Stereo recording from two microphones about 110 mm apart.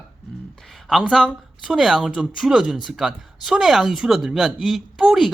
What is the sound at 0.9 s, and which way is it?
Speech, 5° right (ahead or behind).